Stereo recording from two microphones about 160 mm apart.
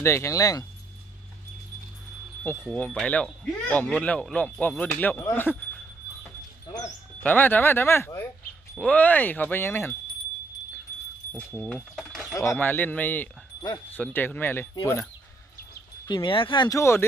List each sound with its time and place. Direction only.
0.0 s speech: 15° left (ahead or behind)
2.4 s speech: 15° left (ahead or behind)
7.2 s speech: 10° left (ahead or behind)
11.3 s speech: 5° left (ahead or behind)
12.3 s speech: 15° left (ahead or behind)
16.1 s speech: 30° left (ahead or behind)